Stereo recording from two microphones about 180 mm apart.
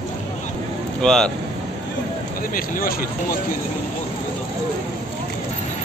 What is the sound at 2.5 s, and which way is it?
Speech, 50° left (ahead or behind).